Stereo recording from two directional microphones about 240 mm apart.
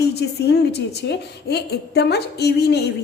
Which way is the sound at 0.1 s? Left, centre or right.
Left.